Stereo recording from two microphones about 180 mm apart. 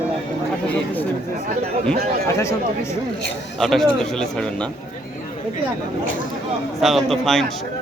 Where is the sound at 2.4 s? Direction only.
15° left (ahead or behind).